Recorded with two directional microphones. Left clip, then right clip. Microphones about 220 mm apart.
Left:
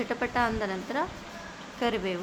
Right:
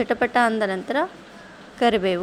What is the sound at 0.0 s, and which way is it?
Speech, 25° right (ahead or behind).